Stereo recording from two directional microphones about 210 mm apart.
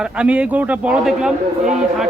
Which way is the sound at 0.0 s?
5° right (ahead or behind).